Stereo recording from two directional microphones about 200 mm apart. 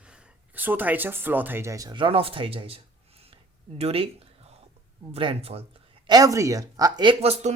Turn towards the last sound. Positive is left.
turn(degrees=-35)  # may be behind; listen again after turning